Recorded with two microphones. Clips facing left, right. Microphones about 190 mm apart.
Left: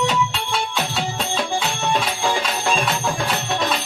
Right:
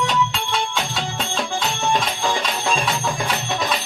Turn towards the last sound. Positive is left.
turn(degrees=0)  # may be behind; listen again after turning